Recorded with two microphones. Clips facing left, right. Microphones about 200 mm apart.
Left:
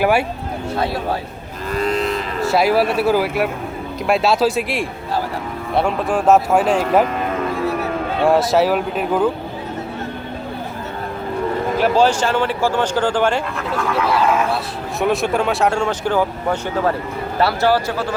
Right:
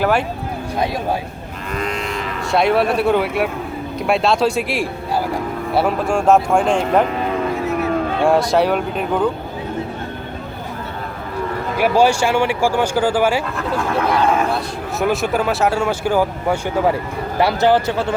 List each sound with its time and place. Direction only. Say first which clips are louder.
0.0 s speech: left 1 dB; 10° left (ahead or behind)
1.7 s cattle: left 4 dB; 35° left (ahead or behind)
2.5 s speech: even; 5° left (ahead or behind)
8.2 s speech: left 1 dB; centre (ahead or behind)
11.8 s a man's voice: right 2 dB; 10° right (ahead or behind)